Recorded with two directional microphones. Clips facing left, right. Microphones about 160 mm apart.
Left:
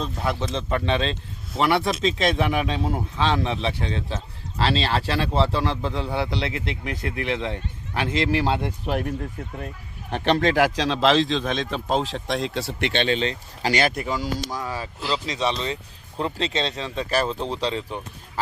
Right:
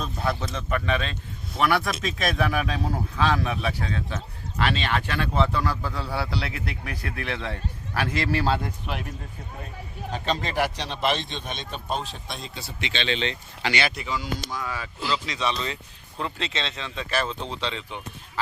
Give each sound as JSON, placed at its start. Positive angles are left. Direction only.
{"t": 0.0, "sound": "a man's voice", "side_deg": 20}
{"t": 8.9, "sound": "speech", "side_deg": 50}
{"t": 10.1, "sound": "speech", "side_deg": 65}